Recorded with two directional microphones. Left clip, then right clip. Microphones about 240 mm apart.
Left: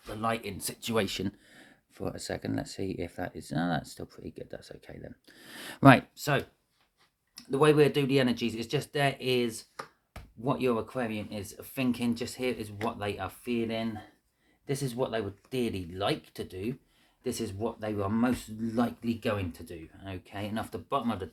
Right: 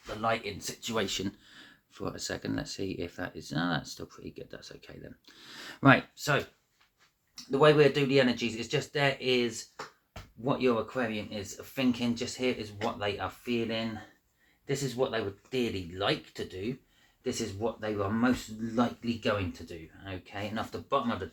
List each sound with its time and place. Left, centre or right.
0.2 s speech: left
7.5 s speech: left